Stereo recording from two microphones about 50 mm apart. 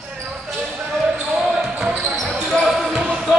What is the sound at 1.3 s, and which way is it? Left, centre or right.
Basketball bounce, centre.